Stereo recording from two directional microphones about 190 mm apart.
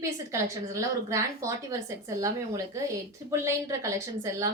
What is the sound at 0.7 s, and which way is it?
Speech, 15° right (ahead or behind).